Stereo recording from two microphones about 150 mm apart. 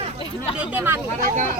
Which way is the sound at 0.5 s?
10° right (ahead or behind).